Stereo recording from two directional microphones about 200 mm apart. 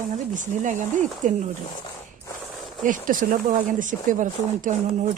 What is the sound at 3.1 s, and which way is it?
Speech, 45° right (ahead or behind).